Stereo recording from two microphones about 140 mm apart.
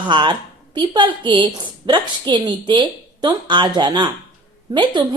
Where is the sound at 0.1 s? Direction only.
35° right (ahead or behind).